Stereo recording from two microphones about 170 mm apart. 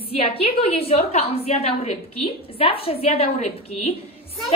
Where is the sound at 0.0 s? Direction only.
35° left (ahead or behind).